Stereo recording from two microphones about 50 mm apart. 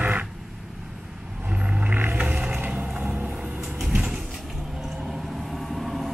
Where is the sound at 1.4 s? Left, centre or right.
Right.